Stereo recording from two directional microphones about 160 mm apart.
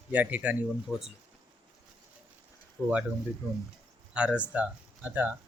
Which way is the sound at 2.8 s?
10° right (ahead or behind).